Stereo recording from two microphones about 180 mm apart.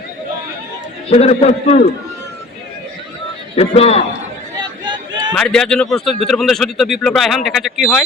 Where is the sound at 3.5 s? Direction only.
35° left (ahead or behind).